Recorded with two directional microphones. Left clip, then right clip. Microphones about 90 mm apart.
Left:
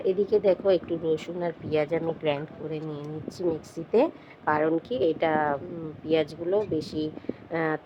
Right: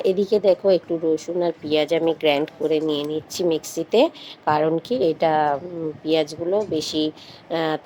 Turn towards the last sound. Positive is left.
turn(degrees=-25)  # may be behind; listen again after turning